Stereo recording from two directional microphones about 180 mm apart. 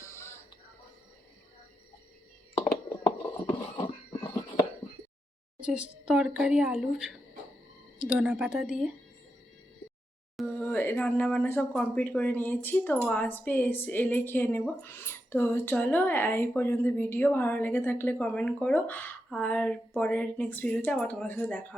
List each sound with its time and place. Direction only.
0.0 s music: 15° left (ahead or behind)
3.8 s a sound: 25° left (ahead or behind)
5.5 s a woman's voice: 5° right (ahead or behind)
10.3 s speech: 10° left (ahead or behind)